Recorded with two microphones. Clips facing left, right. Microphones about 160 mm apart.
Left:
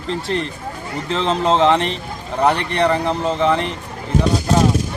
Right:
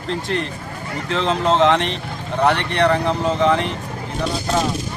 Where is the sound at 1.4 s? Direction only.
30° left (ahead or behind).